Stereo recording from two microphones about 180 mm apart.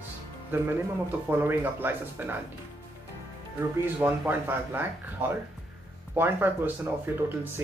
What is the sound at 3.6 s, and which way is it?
Speech, 10° right (ahead or behind).